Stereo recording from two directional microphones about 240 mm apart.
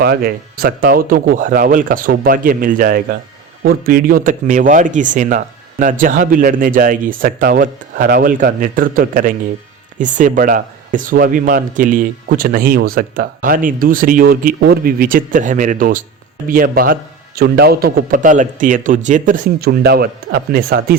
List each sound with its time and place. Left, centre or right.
0.0 s speech: right